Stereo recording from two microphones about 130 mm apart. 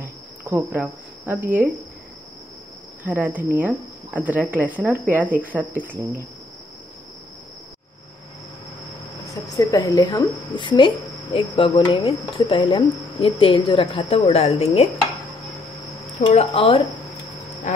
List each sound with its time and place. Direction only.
0.0 s cricket: 15° right (ahead or behind)
1.2 s speech: 15° right (ahead or behind)
3.0 s speech: 15° right (ahead or behind)
9.6 s a woman's voice: 25° left (ahead or behind); by 14.9 s 55° left (ahead or behind)
16.3 s a woman's voice: 50° left (ahead or behind)